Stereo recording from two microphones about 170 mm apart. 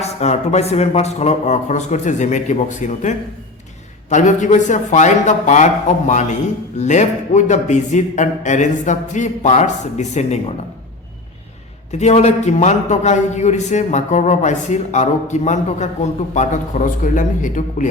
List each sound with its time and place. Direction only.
0.0 s a man's voice: 40° left (ahead or behind)
11.9 s a man's voice: 40° left (ahead or behind)